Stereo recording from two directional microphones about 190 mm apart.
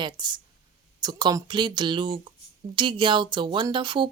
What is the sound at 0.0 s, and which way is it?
Speech, 20° right (ahead or behind).